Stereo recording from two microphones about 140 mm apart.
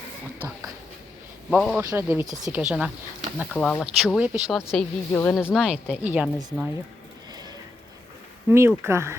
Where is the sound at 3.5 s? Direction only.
5° left (ahead or behind).